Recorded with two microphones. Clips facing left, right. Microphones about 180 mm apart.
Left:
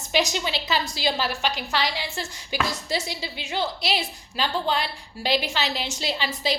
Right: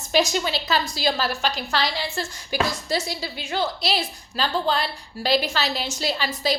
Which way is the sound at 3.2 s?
15° left (ahead or behind).